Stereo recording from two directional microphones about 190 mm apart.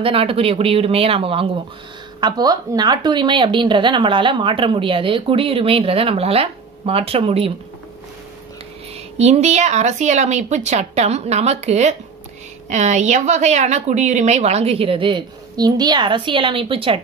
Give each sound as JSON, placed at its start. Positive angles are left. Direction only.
{"t": 0.0, "sound": "a woman's voice", "side_deg": -30}
{"t": 9.2, "sound": "a woman's voice", "side_deg": -35}